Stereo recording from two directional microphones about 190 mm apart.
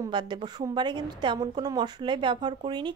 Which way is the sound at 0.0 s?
25° right (ahead or behind).